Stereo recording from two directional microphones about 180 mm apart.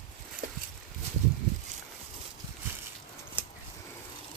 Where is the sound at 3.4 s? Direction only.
30° right (ahead or behind).